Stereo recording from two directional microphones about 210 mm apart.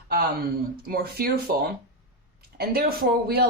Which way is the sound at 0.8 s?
45° right (ahead or behind).